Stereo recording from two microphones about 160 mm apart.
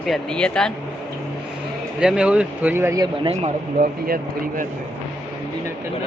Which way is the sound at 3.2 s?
40° right (ahead or behind).